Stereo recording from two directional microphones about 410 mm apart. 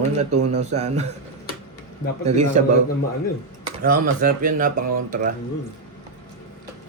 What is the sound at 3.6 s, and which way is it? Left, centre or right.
Speech, right.